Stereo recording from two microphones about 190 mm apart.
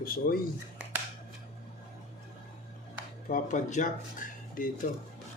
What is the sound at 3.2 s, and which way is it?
Speech, 40° left (ahead or behind).